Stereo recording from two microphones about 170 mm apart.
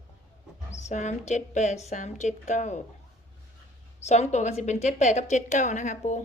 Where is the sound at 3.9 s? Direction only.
40° left (ahead or behind).